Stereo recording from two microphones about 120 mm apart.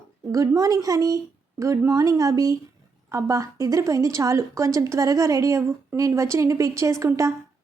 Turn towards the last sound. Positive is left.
turn(degrees=-25)  # may be behind; listen again after turning